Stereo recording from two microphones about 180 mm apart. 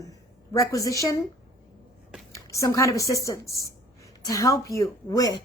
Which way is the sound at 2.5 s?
15° left (ahead or behind).